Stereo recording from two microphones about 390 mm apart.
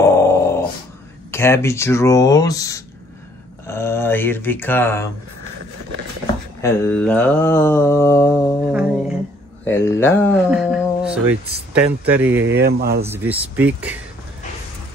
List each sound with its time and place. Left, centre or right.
0.0 s dog: centre
1.3 s mantra: centre
3.6 s speech: centre
6.6 s mantra: centre
8.7 s a sound: centre
9.7 s speech: centre
12.4 s speech: right
13.0 s speech: centre